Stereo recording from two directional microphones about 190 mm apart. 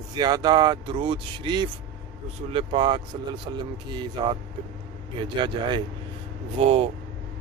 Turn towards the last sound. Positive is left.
turn(degrees=-30)  # may be behind; listen again after turning